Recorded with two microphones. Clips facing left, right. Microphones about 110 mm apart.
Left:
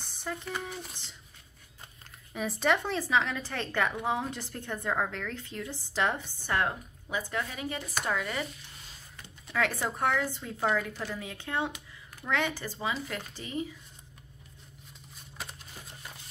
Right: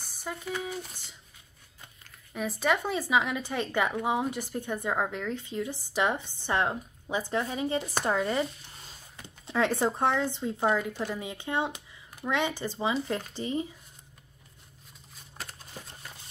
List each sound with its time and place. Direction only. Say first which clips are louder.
0.0 s speech: even; 5° right (ahead or behind)
2.3 s speech: even; centre (ahead or behind); by 13.7 s 30° right (ahead or behind)